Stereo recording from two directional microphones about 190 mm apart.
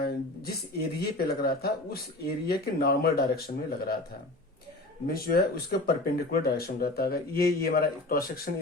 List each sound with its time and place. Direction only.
0.0 s speech: 55° left (ahead or behind)
5.0 s speech: 50° left (ahead or behind)